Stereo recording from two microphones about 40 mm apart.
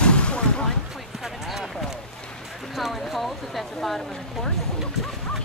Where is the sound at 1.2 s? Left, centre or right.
Centre.